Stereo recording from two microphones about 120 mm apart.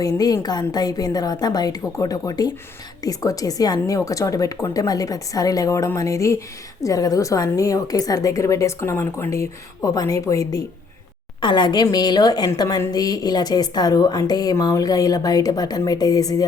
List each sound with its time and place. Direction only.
0.4 s a woman's voice: 35° left (ahead or behind)
11.3 s a woman's voice: 40° left (ahead or behind)